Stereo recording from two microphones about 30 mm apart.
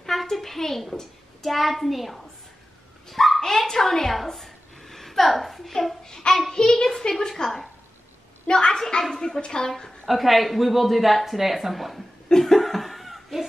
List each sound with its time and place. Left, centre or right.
0.0 s a sound: centre
1.4 s speech: centre
3.1 s dog: centre
3.3 s a sound: centre
6.0 s child singing: centre
6.8 s a woman's voice: centre
8.5 s a woman's voice: left
9.7 s a woman's voice: centre
10.0 s speech: centre
12.3 s cough: centre
12.5 s laughter: centre